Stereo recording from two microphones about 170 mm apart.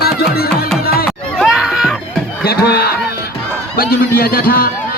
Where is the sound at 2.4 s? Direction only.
65° left (ahead or behind).